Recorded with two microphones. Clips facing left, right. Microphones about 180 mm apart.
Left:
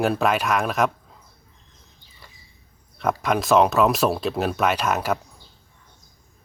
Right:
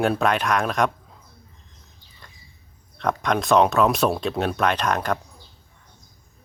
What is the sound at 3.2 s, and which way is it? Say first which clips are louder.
Speech: even; 5° left (ahead or behind).